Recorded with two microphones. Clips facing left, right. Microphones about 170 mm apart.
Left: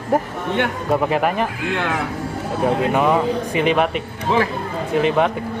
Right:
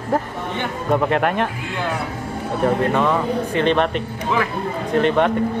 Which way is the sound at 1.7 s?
70° left (ahead or behind).